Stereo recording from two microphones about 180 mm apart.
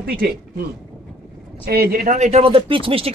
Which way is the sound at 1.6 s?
55° right (ahead or behind).